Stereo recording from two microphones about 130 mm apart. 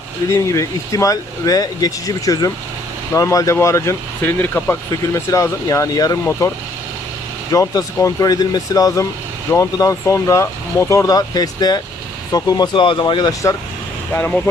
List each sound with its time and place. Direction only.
0.3 s speech: 25° left (ahead or behind)
7.5 s speech: 25° left (ahead or behind)
14.1 s speech: 10° left (ahead or behind)